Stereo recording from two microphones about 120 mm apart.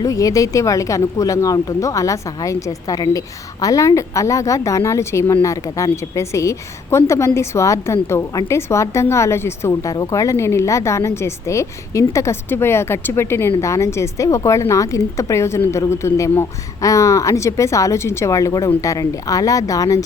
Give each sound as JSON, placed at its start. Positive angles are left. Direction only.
{"t": 0.0, "sound": "speech", "side_deg": 30}